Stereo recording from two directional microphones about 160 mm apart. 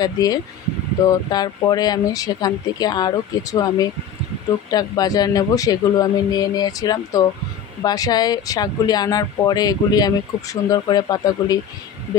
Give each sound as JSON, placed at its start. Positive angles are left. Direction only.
{"t": 0.0, "sound": "speech", "side_deg": 25}